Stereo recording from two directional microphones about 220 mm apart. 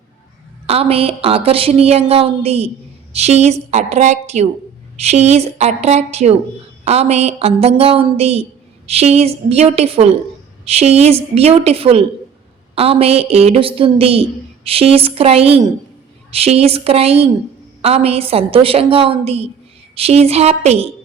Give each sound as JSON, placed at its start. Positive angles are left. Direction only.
{"t": 0.7, "sound": "a woman's voice", "side_deg": -25}